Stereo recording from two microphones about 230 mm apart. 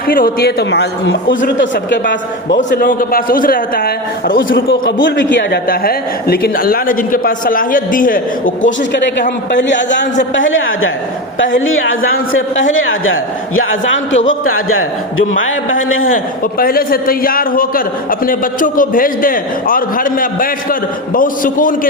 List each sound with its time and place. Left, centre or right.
0.1 s a man's voice: left
2.6 s a man's voice: left
9.5 s a man's voice: left
16.0 s a man's voice: left